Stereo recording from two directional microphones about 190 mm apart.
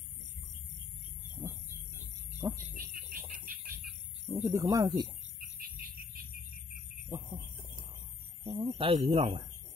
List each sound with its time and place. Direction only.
2.5 s speech: 50° right (ahead or behind)
3.1 s bird: 45° right (ahead or behind)
4.4 s speech: 15° right (ahead or behind)
7.1 s a sound: 20° right (ahead or behind)
8.5 s speech: 25° right (ahead or behind)